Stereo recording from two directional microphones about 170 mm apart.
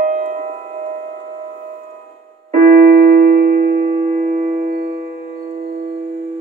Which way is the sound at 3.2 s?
55° right (ahead or behind).